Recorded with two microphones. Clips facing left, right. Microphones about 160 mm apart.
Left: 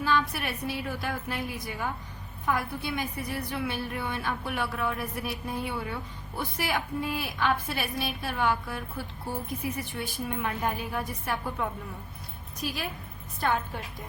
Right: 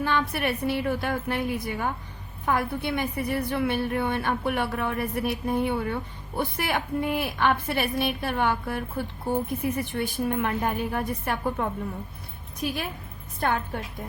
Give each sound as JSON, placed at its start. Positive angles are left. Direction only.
{"t": 0.0, "sound": "a woman's voice", "side_deg": -55}